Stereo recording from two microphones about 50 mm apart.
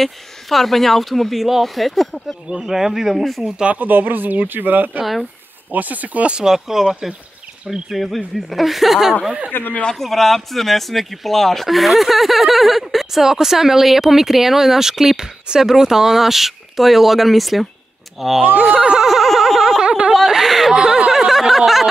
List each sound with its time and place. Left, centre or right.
0.0 s speech: centre
2.5 s speech: centre
3.4 s speech: centre
3.7 s speech: right
6.4 s speech: centre
7.9 s speech: centre
9.5 s speech: left
9.9 s speech: centre
18.8 s speech: centre
19.0 s a sound: centre
19.8 s a sound: centre
20.1 s a sound: centre
20.7 s speech: centre
21.1 s a sound: centre